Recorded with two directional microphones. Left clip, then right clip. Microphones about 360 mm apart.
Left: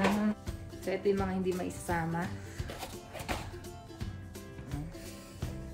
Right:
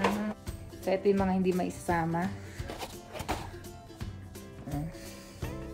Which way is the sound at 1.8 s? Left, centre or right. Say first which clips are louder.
Right 4 dB; right.